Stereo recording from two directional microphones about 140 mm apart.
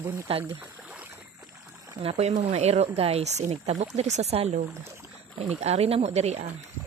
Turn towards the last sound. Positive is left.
turn(degrees=-50)  # may be behind; listen again after turning